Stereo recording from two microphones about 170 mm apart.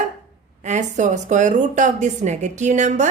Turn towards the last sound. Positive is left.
turn(degrees=-45)  # may be behind; listen again after turning